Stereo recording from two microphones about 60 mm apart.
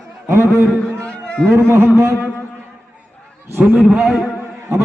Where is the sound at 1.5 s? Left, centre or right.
Right.